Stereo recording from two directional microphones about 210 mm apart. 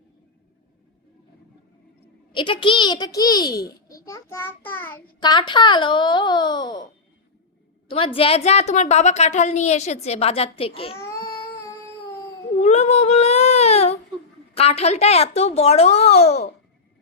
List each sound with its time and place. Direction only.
2.3 s a child's voice: 25° left (ahead or behind)
5.2 s a child's voice: 20° left (ahead or behind)
7.9 s a woman's voice: 25° left (ahead or behind)
10.9 s child singing: 15° left (ahead or behind)
12.6 s baby cry: 30° left (ahead or behind)
14.5 s a child's voice: 30° left (ahead or behind)